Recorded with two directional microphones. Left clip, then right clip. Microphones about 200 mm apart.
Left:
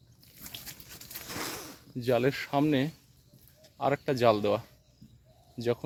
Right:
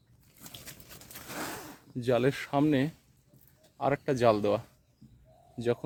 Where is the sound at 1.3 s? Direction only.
40° right (ahead or behind).